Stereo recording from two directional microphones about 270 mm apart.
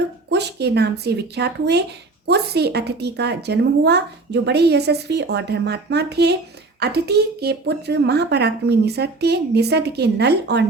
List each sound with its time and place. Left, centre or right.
0.3 s a woman's voice: right